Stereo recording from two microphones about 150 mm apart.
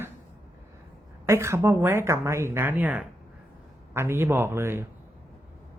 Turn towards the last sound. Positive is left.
turn(degrees=-15)  # may be behind; listen again after turning